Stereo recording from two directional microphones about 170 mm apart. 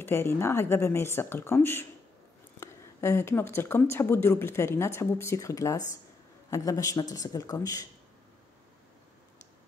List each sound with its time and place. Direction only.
0.0 s speech: 15° left (ahead or behind)